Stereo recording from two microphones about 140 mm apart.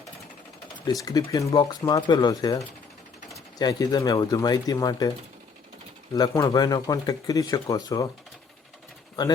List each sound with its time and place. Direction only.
0.9 s speech: 25° left (ahead or behind)
6.1 s speech: 25° left (ahead or behind)